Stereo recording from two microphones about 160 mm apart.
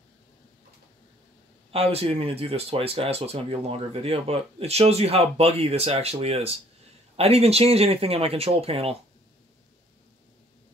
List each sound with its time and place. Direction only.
1.7 s speech: 40° right (ahead or behind)